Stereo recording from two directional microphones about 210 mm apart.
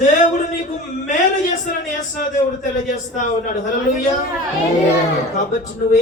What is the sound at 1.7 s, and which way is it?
Speech, 40° left (ahead or behind).